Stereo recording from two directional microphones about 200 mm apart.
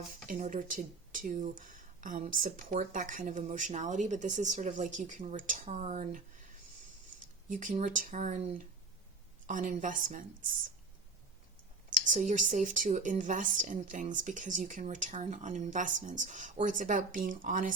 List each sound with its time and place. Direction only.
0.3 s speech: 40° right (ahead or behind)
7.5 s speech: 40° right (ahead or behind)
11.9 s speech: 40° right (ahead or behind)